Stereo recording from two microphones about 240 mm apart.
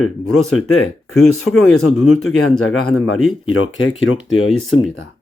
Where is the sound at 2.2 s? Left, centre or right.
Left.